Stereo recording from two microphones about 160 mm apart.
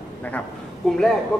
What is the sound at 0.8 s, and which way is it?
Speech, 5° left (ahead or behind).